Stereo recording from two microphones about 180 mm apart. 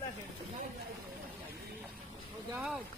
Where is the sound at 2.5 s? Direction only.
Centre (ahead or behind).